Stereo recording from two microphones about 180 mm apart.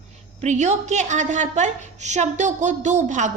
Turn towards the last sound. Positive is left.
turn(degrees=-40)  # may be behind; listen again after turning